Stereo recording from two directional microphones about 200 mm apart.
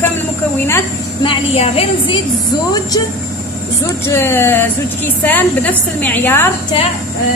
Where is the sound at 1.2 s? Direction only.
25° left (ahead or behind).